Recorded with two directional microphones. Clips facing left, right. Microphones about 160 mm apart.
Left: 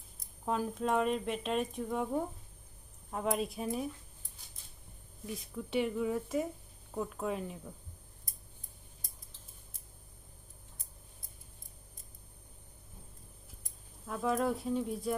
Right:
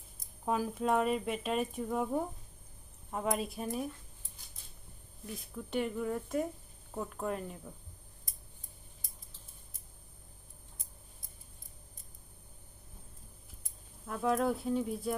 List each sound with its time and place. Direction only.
0.4 s speech: 5° right (ahead or behind)
5.2 s speech: centre (ahead or behind)
14.1 s speech: centre (ahead or behind)